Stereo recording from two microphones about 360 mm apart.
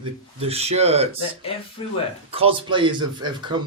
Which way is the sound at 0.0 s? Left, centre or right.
Centre.